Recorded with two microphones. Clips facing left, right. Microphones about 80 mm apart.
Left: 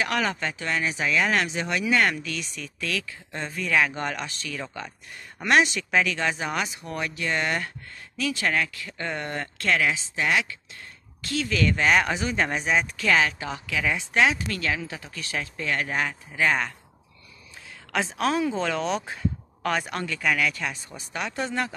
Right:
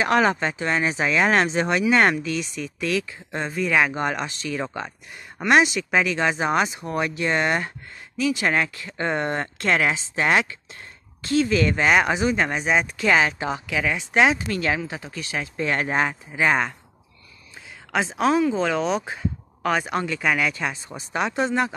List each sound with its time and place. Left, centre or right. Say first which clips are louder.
0.0 s speech: right 6 dB; right
5.5 s speech: right 3 dB; centre
8.2 s speech: right 5 dB; centre
8.5 s speech: right 3 dB; right
11.2 s speech: right 5 dB; right
15.5 s speech: right 5 dB; right
18.5 s speech: right 4 dB; centre